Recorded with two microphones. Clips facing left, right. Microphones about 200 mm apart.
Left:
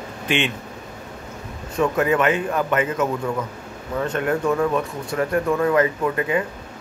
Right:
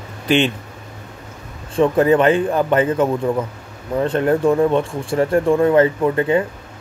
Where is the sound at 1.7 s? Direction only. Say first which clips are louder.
Right 6 dB; 30° right (ahead or behind).